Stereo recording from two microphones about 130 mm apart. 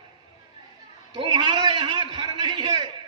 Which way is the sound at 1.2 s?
45° right (ahead or behind).